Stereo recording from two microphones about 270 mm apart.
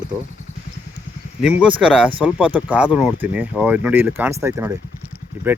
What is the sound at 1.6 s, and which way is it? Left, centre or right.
Speech, centre.